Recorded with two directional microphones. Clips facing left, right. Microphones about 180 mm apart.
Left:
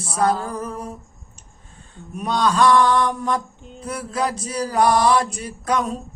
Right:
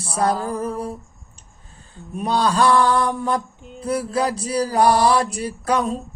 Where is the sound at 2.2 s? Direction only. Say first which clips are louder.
Even; 35° right (ahead or behind).